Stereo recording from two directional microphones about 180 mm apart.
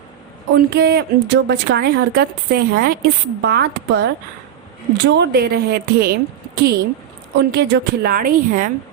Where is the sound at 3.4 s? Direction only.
65° right (ahead or behind).